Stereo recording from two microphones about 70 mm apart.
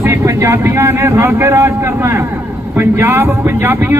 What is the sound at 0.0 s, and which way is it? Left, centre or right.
A man's voice, right.